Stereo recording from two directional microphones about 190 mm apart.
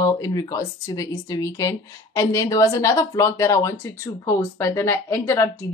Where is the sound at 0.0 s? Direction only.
20° left (ahead or behind).